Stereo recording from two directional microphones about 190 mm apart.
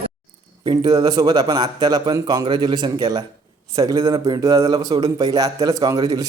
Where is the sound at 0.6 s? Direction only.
25° right (ahead or behind).